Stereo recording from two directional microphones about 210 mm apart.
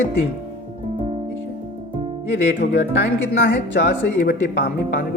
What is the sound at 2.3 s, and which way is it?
A man's voice, 60° left (ahead or behind).